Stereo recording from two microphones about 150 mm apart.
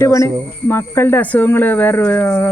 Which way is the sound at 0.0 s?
20° left (ahead or behind).